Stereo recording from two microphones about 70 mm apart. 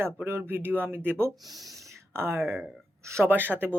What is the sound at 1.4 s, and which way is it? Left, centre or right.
Speech, right.